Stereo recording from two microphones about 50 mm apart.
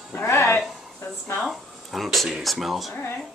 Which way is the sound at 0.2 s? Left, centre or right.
Left.